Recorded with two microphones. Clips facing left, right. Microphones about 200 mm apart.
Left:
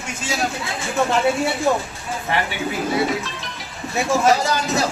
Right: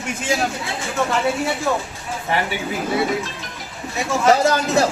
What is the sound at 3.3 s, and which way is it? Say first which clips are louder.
Music: even; 45° right (ahead or behind).